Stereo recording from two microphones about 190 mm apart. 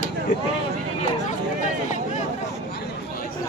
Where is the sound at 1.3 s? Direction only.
40° left (ahead or behind).